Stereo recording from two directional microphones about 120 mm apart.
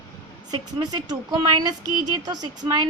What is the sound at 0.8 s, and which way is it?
Speech, 40° right (ahead or behind).